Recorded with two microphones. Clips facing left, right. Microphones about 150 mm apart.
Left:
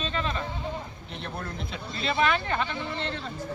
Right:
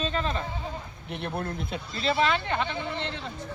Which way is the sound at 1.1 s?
55° right (ahead or behind).